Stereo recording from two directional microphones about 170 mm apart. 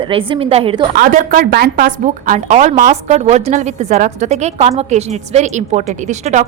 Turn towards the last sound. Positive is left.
turn(degrees=-45)  # may be behind; listen again after turning